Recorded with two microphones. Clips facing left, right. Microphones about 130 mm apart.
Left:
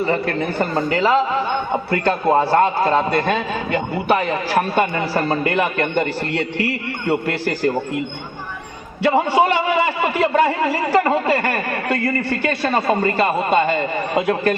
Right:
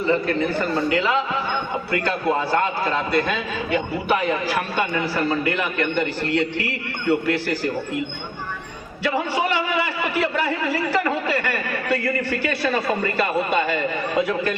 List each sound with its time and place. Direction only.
0.0 s a man's voice: 45° left (ahead or behind)
1.7 s a man's voice: 50° left (ahead or behind)
9.0 s a man's voice: 50° left (ahead or behind)